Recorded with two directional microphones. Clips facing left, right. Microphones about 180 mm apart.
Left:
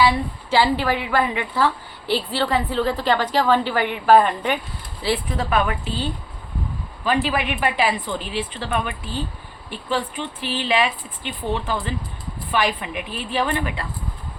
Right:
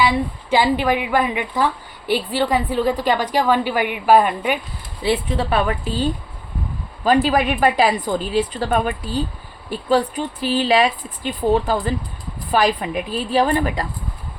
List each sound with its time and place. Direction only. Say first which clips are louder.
0.5 s a woman's voice: right 2 dB; 15° right (ahead or behind)
5.0 s speech: right 3 dB; 25° right (ahead or behind)